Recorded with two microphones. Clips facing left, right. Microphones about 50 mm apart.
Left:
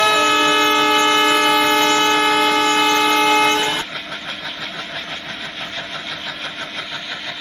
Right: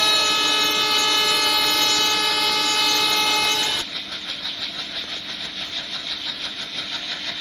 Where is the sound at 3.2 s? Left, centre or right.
Left.